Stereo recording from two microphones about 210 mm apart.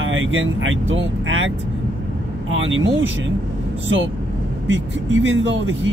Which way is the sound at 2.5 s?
65° right (ahead or behind).